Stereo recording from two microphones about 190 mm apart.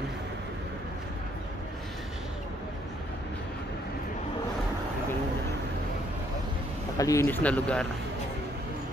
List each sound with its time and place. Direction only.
7.0 s speech: 15° left (ahead or behind)